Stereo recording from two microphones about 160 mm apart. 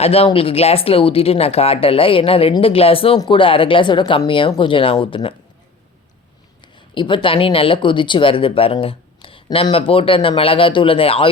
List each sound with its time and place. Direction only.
0.0 s speech: 40° left (ahead or behind)
6.9 s speech: 30° left (ahead or behind)